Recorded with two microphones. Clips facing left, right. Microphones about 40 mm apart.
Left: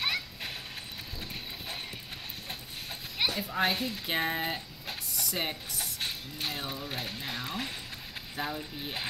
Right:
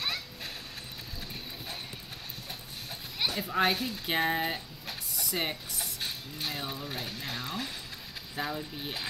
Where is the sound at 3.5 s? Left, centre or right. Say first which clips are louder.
Right 1 dB; centre.